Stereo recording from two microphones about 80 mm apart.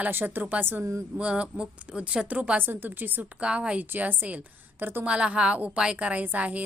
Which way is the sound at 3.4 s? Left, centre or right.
Centre.